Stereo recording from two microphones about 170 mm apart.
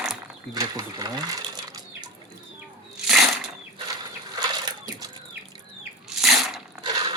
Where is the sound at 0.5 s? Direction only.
20° right (ahead or behind).